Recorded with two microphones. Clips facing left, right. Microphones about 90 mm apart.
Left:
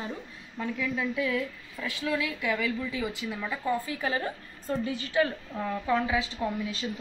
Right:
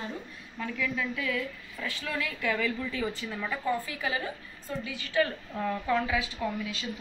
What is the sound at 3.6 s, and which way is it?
A woman's voice, 30° left (ahead or behind).